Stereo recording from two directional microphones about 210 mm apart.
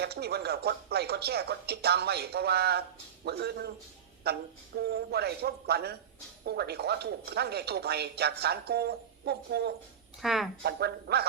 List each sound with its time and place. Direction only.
0.0 s speech: 50° right (ahead or behind)
10.2 s speech: centre (ahead or behind)
10.6 s speech: 50° right (ahead or behind)